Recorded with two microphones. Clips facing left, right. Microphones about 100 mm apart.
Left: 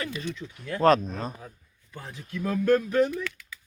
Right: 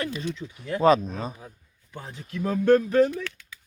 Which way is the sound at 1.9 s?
20° right (ahead or behind).